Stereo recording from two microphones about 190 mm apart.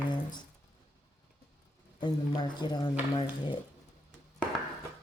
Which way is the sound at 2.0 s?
25° left (ahead or behind).